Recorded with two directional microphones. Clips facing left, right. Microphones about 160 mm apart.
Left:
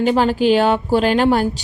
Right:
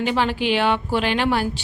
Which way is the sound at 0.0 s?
40° left (ahead or behind).